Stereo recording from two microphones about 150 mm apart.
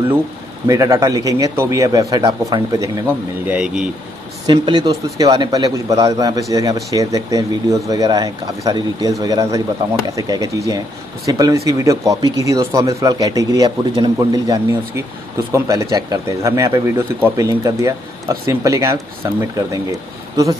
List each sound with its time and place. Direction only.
0.7 s speech: 20° right (ahead or behind)
3.1 s speech: 10° right (ahead or behind)
4.5 s speech: 25° right (ahead or behind)